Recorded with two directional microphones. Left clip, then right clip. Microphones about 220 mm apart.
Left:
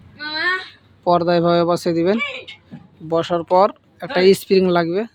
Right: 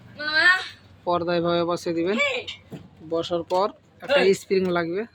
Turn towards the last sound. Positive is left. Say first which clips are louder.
# left 7 dB
turn(degrees=35)  # may be behind; listen again after turning